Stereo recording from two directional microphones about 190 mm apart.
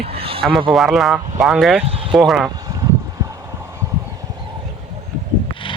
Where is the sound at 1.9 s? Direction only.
30° right (ahead or behind).